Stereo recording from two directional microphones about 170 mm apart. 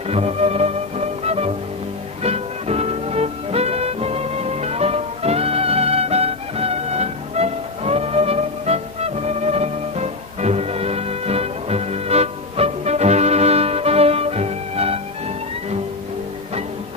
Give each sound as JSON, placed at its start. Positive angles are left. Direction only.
{"t": 0.1, "sound": "music", "side_deg": -35}